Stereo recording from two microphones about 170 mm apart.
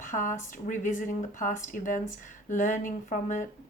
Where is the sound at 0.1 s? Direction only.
50° left (ahead or behind).